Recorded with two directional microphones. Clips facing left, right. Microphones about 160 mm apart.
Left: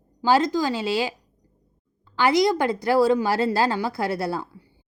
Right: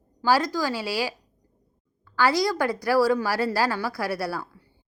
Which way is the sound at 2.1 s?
20° left (ahead or behind).